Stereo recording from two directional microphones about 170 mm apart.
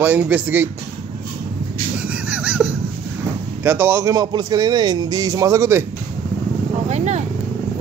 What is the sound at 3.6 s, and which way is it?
Speech, 15° right (ahead or behind).